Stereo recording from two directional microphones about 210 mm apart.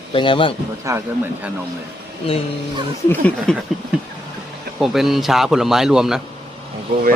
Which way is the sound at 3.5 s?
5° left (ahead or behind).